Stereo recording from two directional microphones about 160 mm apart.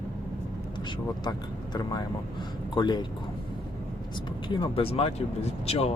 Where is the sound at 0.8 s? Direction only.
25° left (ahead or behind).